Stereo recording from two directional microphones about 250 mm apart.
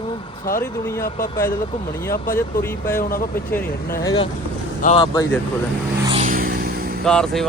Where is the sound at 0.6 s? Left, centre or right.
Centre.